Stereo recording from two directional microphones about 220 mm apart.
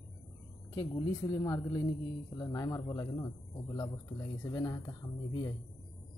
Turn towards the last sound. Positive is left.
turn(degrees=20)  # may be behind; listen again after turning